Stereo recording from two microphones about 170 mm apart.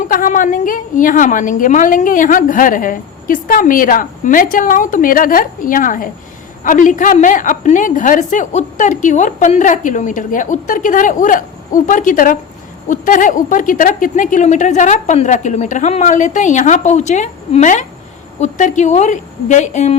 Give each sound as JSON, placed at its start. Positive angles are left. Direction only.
{"t": 0.1, "sound": "a woman's voice", "side_deg": 50}